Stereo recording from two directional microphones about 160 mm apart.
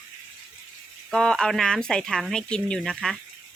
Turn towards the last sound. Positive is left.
turn(degrees=0)  # may be behind; listen again after turning